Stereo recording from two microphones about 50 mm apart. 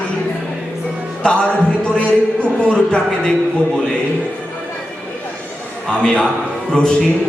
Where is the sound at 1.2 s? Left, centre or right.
Centre.